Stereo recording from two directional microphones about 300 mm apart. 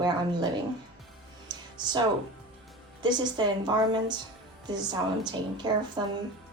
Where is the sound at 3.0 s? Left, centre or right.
Centre.